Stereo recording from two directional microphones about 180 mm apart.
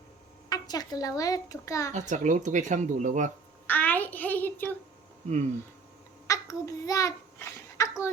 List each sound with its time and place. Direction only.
0.5 s a child's voice: 20° left (ahead or behind)
1.9 s speech: 40° right (ahead or behind)
3.7 s a child's voice: 10° left (ahead or behind)
6.2 s a sound: 20° left (ahead or behind)